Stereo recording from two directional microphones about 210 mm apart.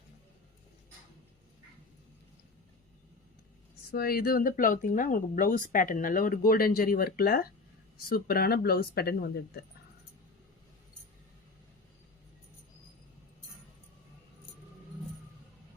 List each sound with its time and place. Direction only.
3.9 s speech: 45° left (ahead or behind)